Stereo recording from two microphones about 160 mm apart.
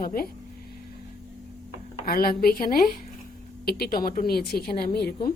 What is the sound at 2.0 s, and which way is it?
Speech, 70° left (ahead or behind).